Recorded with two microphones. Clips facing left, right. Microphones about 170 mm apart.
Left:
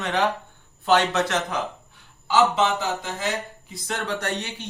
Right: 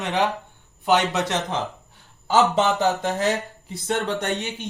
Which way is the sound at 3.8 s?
20° right (ahead or behind).